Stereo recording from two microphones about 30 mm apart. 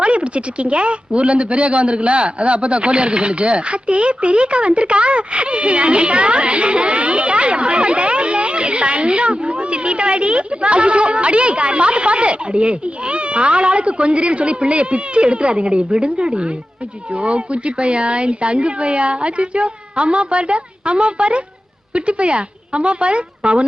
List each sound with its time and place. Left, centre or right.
0.0 s speech: right